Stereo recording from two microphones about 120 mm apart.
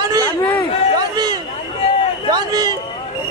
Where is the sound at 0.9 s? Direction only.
35° right (ahead or behind).